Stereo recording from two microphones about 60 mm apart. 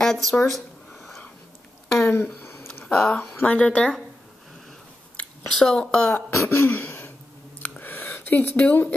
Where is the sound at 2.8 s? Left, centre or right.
Centre.